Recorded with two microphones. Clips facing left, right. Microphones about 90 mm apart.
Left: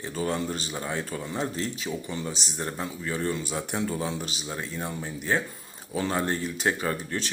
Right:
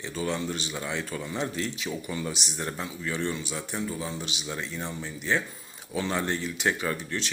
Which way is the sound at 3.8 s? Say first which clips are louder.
Left 3 dB; 60° left (ahead or behind).